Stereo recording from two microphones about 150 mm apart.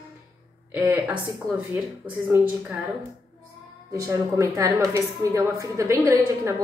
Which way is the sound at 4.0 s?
20° right (ahead or behind).